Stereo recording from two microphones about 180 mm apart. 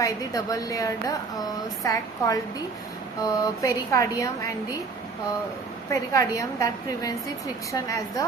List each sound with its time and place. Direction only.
0.0 s a woman's voice: 20° left (ahead or behind)
5.9 s a woman's voice: 20° left (ahead or behind)